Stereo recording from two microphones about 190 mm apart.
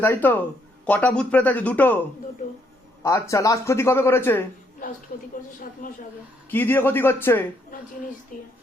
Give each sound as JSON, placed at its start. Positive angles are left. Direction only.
{"t": 0.0, "sound": "speech", "side_deg": 10}
{"t": 3.0, "sound": "speech", "side_deg": 15}
{"t": 5.8, "sound": "speech", "side_deg": 45}
{"t": 6.5, "sound": "speech", "side_deg": 10}
{"t": 8.3, "sound": "speech", "side_deg": 45}